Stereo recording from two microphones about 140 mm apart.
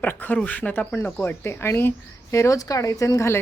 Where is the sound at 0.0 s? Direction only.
10° left (ahead or behind).